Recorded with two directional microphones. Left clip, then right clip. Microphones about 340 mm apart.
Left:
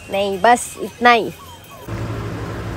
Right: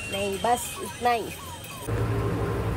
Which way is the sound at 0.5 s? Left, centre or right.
Left.